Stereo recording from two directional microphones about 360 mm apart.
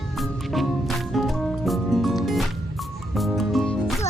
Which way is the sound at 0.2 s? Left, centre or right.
Centre.